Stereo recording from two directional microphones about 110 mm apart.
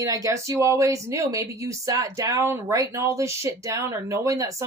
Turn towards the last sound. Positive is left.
turn(degrees=-30)  # may be behind; listen again after turning